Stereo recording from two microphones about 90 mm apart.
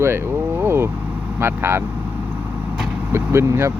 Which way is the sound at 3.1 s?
25° right (ahead or behind).